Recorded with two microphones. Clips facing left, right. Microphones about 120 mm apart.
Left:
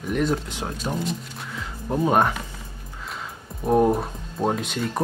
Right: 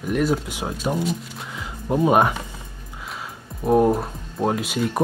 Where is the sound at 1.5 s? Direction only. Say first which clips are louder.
Right 3 dB; 15° right (ahead or behind).